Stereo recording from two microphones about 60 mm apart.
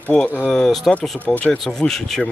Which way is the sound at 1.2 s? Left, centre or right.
Left.